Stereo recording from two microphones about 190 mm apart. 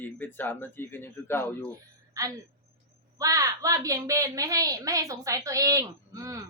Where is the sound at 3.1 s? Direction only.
15° right (ahead or behind).